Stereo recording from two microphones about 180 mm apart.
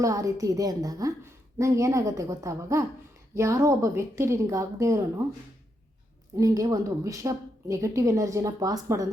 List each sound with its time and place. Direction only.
0.0 s a woman's voice: 20° right (ahead or behind)
6.3 s a woman's voice: 20° right (ahead or behind)